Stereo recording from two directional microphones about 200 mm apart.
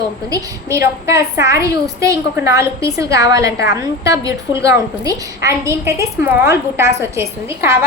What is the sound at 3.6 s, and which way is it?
Speech, 60° left (ahead or behind).